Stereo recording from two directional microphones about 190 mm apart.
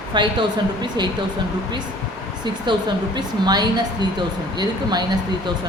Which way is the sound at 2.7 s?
25° right (ahead or behind).